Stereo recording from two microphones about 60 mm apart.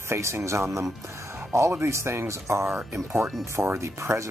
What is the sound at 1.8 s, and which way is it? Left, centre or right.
Speech, right.